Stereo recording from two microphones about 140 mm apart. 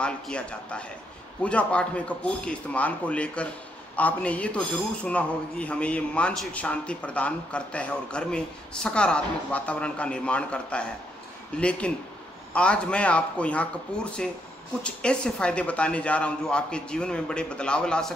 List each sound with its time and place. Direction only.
0.0 s a man's voice: 5° left (ahead or behind)